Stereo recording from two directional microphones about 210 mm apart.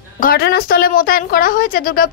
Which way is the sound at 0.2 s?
45° left (ahead or behind).